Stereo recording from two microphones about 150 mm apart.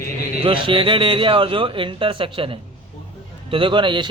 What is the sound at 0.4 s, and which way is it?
A man's voice, 35° right (ahead or behind).